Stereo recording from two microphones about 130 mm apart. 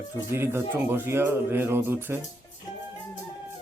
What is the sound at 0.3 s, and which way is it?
Speech, 15° right (ahead or behind).